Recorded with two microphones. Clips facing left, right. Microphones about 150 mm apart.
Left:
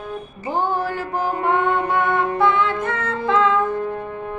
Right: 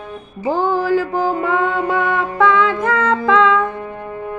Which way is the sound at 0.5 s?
90° right.